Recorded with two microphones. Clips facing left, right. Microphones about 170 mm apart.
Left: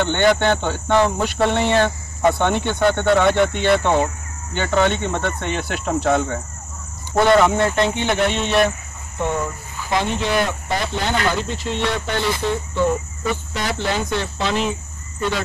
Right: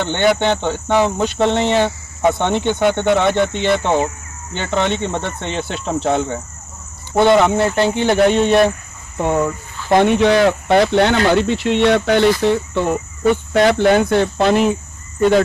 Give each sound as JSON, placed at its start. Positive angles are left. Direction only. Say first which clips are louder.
{"t": 0.1, "sound": "speech", "louder": "right 3 dB", "side_deg": -15}
{"t": 4.6, "sound": "speech", "louder": "left 1 dB", "side_deg": 5}
{"t": 4.9, "sound": "speech", "louder": "right 1 dB", "side_deg": -25}
{"t": 7.2, "sound": "speech", "louder": "right 3 dB", "side_deg": -10}
{"t": 7.9, "sound": "cricket", "louder": "right 6 dB", "side_deg": -35}
{"t": 9.8, "sound": "speech", "louder": "right 9 dB", "side_deg": -60}